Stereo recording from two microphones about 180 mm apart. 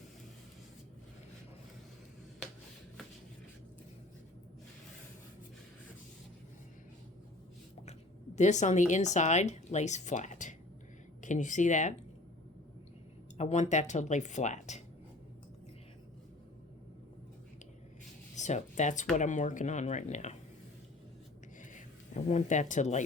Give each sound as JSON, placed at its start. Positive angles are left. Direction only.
{"t": 8.4, "sound": "speech", "side_deg": 40}
{"t": 13.3, "sound": "speech", "side_deg": 40}
{"t": 18.3, "sound": "speech", "side_deg": 40}
{"t": 21.6, "sound": "a sound", "side_deg": 45}